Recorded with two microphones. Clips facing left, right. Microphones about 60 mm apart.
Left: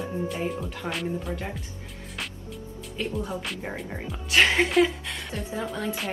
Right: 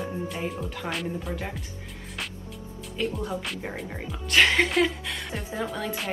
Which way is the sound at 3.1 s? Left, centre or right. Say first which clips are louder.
Even; centre.